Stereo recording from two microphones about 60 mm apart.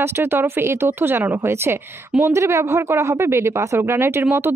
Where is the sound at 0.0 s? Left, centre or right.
Right.